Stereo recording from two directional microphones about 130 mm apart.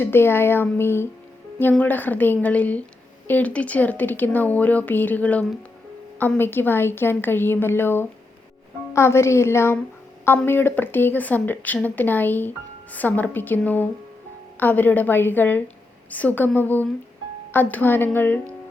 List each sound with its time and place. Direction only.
0.0 s a woman's voice: 15° left (ahead or behind)